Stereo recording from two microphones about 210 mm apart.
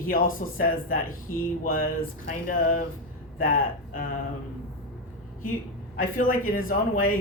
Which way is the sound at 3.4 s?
40° left (ahead or behind).